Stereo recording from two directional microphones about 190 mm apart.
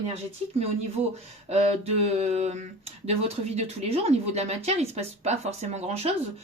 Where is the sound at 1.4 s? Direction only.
35° right (ahead or behind).